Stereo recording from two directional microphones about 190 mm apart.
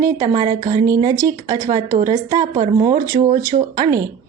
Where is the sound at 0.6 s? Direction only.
40° right (ahead or behind).